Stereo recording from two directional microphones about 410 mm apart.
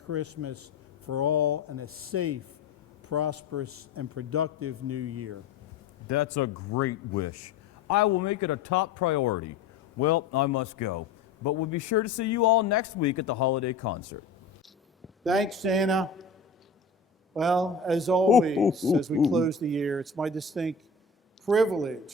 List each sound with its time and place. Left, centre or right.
0.1 s a man's voice: right
6.1 s a man's voice: left
15.2 s a man's voice: centre
17.3 s a man's voice: centre